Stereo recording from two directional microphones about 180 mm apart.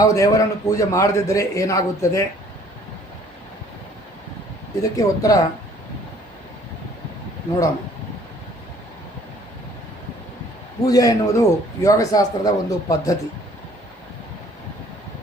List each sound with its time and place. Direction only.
0.0 s a man's voice: 20° left (ahead or behind)
4.8 s speech: 20° left (ahead or behind)
10.8 s speech: 20° left (ahead or behind)